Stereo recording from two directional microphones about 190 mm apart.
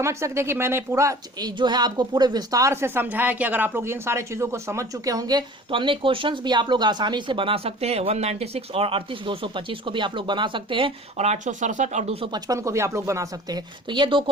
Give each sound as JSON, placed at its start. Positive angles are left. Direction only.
{"t": 0.0, "sound": "a woman's voice", "side_deg": -15}
{"t": 12.2, "sound": "speech", "side_deg": -20}